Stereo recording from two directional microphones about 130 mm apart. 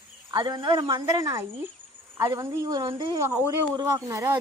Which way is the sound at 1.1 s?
25° right (ahead or behind).